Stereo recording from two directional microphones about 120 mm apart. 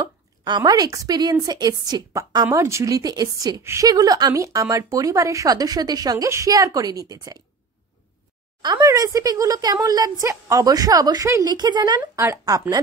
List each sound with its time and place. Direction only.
0.0 s a woman's voice: 35° right (ahead or behind)
8.6 s a woman's voice: 30° right (ahead or behind)